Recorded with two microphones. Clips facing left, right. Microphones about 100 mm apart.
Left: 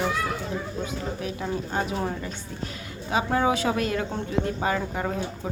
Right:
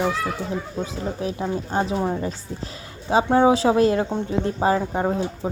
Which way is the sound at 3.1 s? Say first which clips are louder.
Right 7 dB; 25° right (ahead or behind).